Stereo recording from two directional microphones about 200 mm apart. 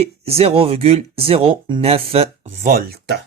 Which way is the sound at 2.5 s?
40° right (ahead or behind).